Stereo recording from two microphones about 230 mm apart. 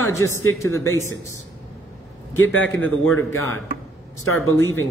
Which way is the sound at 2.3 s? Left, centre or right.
Left.